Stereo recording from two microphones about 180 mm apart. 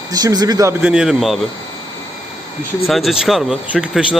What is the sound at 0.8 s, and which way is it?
Speech, 5° right (ahead or behind).